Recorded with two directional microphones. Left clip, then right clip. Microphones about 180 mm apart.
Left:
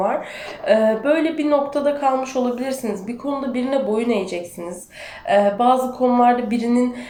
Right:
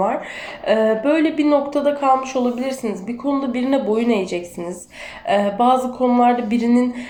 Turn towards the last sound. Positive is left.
turn(degrees=-30)  # may be behind; listen again after turning